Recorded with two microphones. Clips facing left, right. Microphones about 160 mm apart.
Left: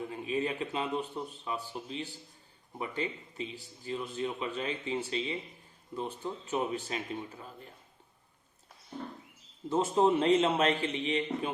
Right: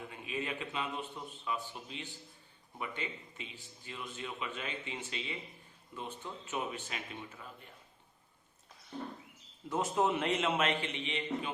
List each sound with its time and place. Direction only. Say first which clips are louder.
0.1 s speech: left 5 dB; 35° left (ahead or behind)
9.6 s speech: left 5 dB; 30° left (ahead or behind)